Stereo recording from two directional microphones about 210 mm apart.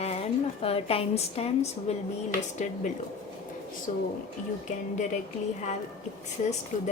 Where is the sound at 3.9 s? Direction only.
35° left (ahead or behind).